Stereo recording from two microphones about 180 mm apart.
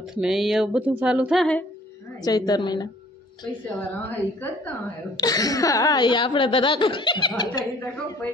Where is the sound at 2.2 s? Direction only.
20° left (ahead or behind).